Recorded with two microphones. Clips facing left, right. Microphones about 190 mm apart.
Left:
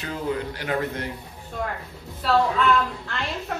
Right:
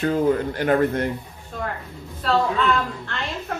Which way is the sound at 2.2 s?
5° left (ahead or behind).